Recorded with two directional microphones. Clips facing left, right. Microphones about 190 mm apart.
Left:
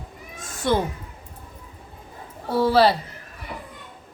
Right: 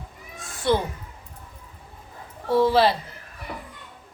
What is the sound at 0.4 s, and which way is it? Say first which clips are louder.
Cat: left 3 dB; 45° left (ahead or behind).